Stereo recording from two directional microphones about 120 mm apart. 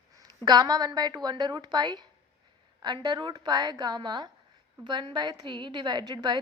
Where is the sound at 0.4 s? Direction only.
35° right (ahead or behind).